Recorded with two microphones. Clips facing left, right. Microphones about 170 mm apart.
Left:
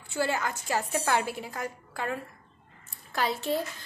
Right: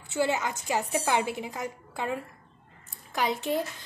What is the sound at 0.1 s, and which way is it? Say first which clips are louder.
A woman's voice: right 2 dB; 20° right (ahead or behind).